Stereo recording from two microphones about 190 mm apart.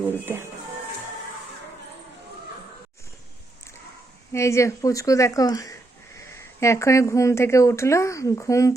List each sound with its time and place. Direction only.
4.3 s speech: 15° left (ahead or behind)